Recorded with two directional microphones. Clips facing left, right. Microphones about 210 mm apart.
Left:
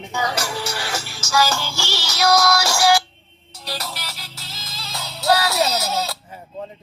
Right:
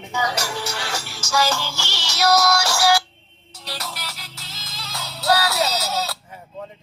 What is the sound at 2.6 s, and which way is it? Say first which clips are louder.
Music: left 2 dB; 10° left (ahead or behind).